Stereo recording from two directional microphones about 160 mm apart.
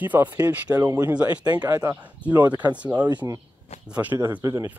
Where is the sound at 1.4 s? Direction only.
25° right (ahead or behind).